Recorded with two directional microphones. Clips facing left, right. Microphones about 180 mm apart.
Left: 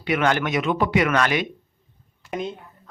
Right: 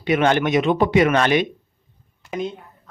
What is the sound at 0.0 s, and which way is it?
Speech, 25° right (ahead or behind).